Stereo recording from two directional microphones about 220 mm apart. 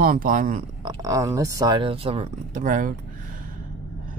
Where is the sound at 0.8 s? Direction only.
15° right (ahead or behind); by 2.9 s 35° right (ahead or behind).